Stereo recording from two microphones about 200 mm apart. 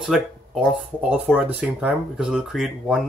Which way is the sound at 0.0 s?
Centre (ahead or behind).